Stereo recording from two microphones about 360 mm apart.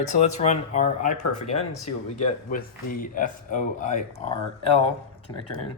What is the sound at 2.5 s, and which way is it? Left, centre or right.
Speech, left.